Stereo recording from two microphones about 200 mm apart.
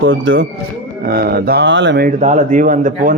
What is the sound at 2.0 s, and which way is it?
Speech, 40° right (ahead or behind).